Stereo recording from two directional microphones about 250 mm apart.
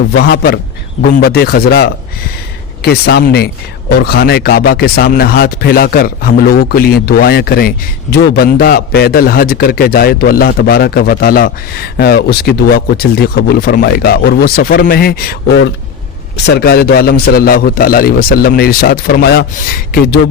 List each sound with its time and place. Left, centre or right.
0.1 s a man's voice: left